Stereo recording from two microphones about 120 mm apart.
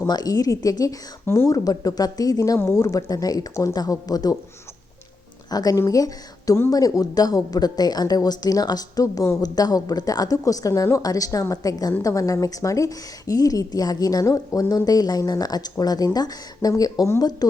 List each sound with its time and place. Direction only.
0.1 s speech: 30° left (ahead or behind)
5.5 s speech: 30° left (ahead or behind)